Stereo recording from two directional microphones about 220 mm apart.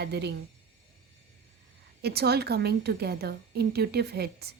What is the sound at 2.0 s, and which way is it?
A woman's voice, 45° right (ahead or behind).